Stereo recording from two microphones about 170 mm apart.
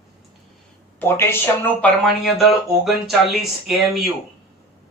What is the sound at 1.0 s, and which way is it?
A man's voice, 15° left (ahead or behind).